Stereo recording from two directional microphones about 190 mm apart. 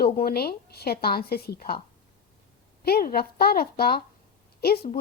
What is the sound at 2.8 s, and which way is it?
A woman's voice, 55° left (ahead or behind).